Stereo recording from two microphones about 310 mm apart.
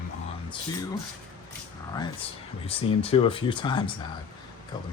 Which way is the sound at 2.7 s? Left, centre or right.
Centre.